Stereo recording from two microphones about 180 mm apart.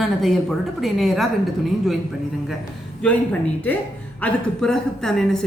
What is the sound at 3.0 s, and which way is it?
A woman's voice, 10° left (ahead or behind).